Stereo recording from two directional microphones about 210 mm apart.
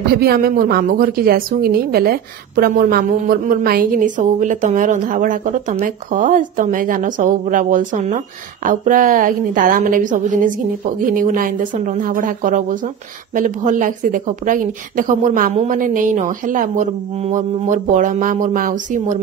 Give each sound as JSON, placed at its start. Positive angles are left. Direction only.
{"t": 0.1, "sound": "a woman's voice", "side_deg": -45}